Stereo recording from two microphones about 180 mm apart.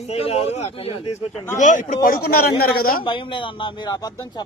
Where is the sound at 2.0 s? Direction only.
55° left (ahead or behind).